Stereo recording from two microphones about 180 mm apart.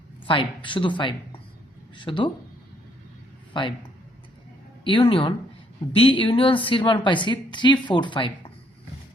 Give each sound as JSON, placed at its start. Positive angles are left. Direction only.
{"t": 0.3, "sound": "a woman's voice", "side_deg": 25}
{"t": 3.5, "sound": "speech", "side_deg": 25}
{"t": 4.8, "sound": "a woman's voice", "side_deg": 30}